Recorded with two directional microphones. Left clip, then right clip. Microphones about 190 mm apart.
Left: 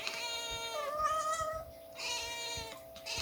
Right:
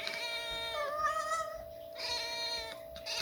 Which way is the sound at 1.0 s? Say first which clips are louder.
Left 2 dB; centre (ahead or behind).